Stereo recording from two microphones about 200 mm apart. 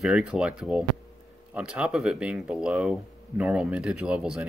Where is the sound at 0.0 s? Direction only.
5° right (ahead or behind).